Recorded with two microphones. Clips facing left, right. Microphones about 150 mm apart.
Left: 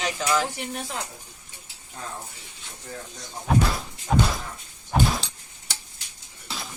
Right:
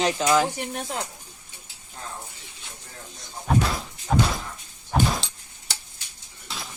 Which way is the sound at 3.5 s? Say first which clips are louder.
Even; centre (ahead or behind).